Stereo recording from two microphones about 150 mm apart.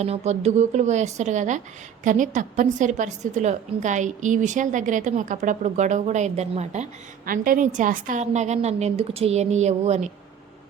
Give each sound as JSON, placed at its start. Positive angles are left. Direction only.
{"t": 0.0, "sound": "a woman's voice", "side_deg": -45}
{"t": 7.3, "sound": "a woman's voice", "side_deg": -70}